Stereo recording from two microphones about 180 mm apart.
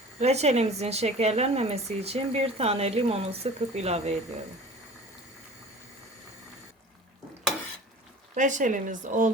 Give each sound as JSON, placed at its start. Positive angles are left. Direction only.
{"t": 0.2, "sound": "speech", "side_deg": -35}
{"t": 8.4, "sound": "speech", "side_deg": -45}